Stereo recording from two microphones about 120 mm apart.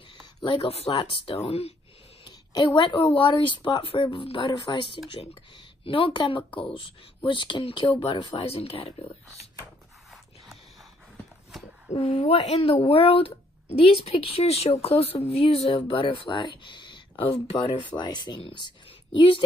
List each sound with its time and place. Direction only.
0.4 s speech: 50° left (ahead or behind)
2.2 s a woman's voice: 40° left (ahead or behind)
5.9 s speech: 45° left (ahead or behind)
11.9 s speech: 60° left (ahead or behind); by 17.3 s 40° left (ahead or behind)
17.3 s speech: 60° left (ahead or behind)
17.6 s a woman's voice: 40° left (ahead or behind)